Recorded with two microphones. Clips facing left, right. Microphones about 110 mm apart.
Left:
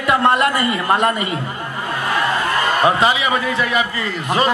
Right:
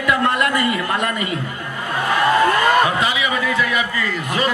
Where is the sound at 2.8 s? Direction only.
35° left (ahead or behind).